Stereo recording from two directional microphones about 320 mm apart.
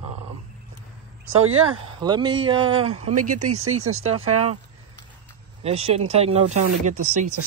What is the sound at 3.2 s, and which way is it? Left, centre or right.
Speech, right.